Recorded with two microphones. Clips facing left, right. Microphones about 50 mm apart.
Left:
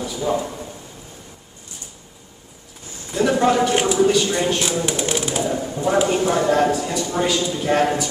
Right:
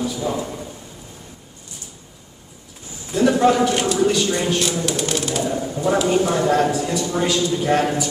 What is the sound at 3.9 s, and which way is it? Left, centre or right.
Speech, centre.